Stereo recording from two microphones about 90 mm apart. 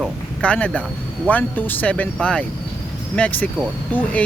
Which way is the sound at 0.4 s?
15° left (ahead or behind).